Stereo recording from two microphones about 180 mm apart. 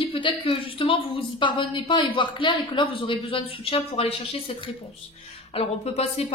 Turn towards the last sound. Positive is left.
turn(degrees=35)  # may be behind; listen again after turning